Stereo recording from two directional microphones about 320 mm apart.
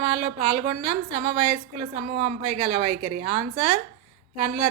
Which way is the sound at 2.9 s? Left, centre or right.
Right.